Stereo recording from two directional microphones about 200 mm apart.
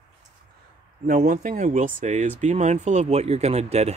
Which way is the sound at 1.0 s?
40° right (ahead or behind).